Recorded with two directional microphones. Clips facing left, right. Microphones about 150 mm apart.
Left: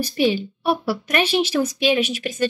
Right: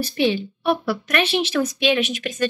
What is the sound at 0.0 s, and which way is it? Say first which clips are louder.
Speech: left 1 dB; 10° left (ahead or behind).